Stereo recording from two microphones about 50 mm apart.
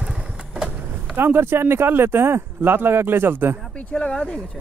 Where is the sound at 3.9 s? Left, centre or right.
Centre.